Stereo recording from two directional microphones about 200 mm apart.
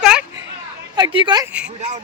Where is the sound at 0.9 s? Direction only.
25° right (ahead or behind).